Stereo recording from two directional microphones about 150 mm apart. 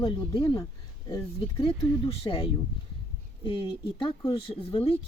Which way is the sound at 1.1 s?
35° left (ahead or behind).